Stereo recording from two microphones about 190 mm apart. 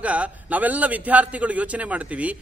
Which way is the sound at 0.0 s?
5° right (ahead or behind).